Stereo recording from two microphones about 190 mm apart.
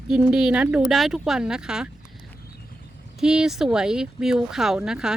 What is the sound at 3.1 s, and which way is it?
A woman's voice, 5° right (ahead or behind).